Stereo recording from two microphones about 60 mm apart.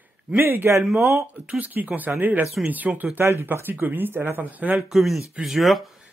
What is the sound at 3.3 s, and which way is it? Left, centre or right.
Speech, right.